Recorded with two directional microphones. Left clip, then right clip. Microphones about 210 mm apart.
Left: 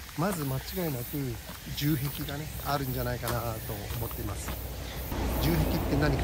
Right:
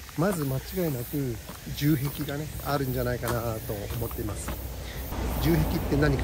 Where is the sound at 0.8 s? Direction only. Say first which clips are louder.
Right 5 dB; 20° left (ahead or behind).